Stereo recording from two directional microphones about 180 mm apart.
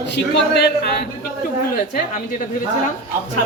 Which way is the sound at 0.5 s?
65° left (ahead or behind).